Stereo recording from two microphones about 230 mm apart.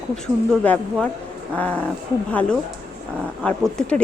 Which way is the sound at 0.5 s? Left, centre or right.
Centre.